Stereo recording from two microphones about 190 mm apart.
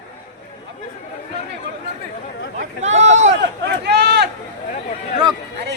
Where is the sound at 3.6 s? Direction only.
60° right (ahead or behind).